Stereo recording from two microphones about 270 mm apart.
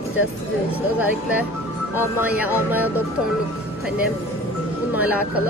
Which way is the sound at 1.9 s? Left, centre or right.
Centre.